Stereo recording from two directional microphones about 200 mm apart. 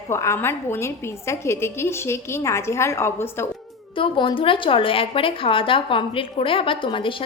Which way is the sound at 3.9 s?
25° left (ahead or behind).